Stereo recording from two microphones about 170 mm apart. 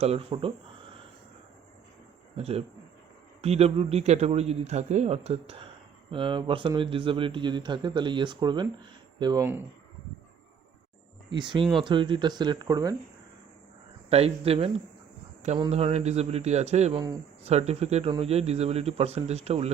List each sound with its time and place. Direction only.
0.0 s a man's voice: 35° right (ahead or behind)
2.4 s a man's voice: 35° right (ahead or behind)
11.3 s a man's voice: 30° right (ahead or behind)
14.1 s a man's voice: 35° right (ahead or behind)